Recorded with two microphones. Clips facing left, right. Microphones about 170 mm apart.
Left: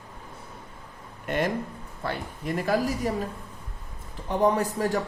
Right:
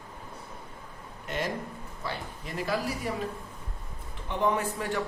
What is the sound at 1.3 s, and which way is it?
A man's voice, 55° left (ahead or behind).